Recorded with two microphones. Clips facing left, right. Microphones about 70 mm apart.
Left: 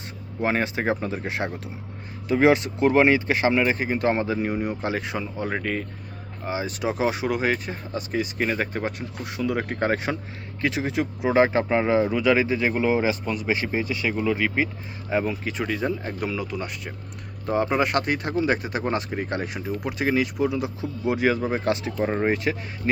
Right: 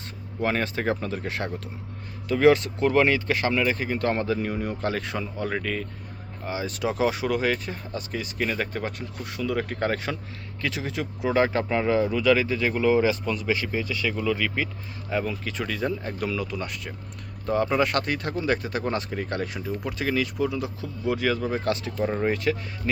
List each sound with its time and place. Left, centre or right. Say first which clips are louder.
0.3 s speech: left 2 dB; centre
8.1 s speech: left 3 dB; left